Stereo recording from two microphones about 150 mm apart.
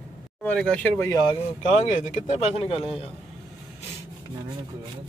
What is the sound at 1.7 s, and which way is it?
Speech, 50° left (ahead or behind).